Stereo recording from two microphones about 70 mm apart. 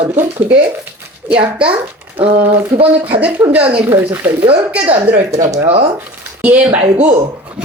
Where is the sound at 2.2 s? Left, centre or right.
Right.